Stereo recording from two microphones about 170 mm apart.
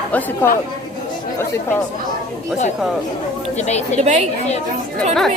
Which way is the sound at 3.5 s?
40° left (ahead or behind).